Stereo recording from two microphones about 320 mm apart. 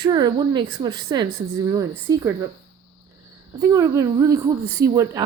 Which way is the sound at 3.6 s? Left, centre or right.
Centre.